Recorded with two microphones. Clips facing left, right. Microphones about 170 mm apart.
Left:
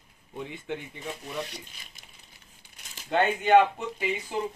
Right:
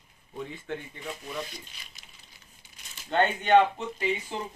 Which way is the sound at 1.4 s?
65° left (ahead or behind).